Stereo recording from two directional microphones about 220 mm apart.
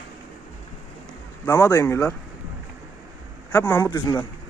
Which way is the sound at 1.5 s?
10° left (ahead or behind).